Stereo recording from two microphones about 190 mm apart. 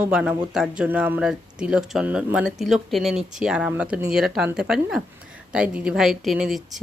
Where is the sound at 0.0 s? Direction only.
5° right (ahead or behind).